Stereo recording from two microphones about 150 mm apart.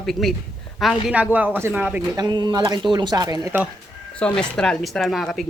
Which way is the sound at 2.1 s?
25° right (ahead or behind).